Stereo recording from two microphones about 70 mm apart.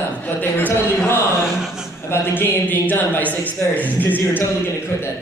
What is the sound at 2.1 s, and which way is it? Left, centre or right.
A man's voice, left.